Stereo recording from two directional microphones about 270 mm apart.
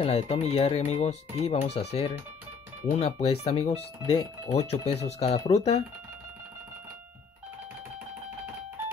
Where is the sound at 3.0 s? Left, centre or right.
Left.